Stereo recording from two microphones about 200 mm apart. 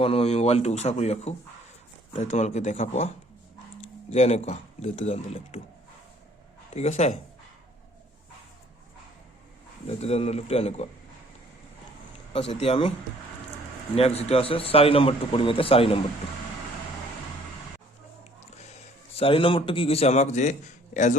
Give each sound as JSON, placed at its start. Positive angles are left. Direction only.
{"t": 0.0, "sound": "speech", "side_deg": 30}
{"t": 6.7, "sound": "speech", "side_deg": 35}
{"t": 9.8, "sound": "speech", "side_deg": 30}
{"t": 12.3, "sound": "a man's voice", "side_deg": 30}
{"t": 13.9, "sound": "a man's voice", "side_deg": 30}
{"t": 19.1, "sound": "speech", "side_deg": 25}